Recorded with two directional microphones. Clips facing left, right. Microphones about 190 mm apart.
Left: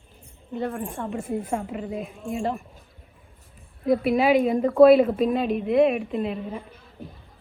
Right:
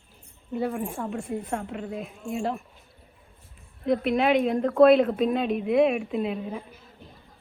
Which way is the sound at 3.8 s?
5° left (ahead or behind).